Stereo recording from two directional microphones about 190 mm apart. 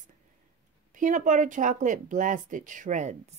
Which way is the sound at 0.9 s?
40° right (ahead or behind).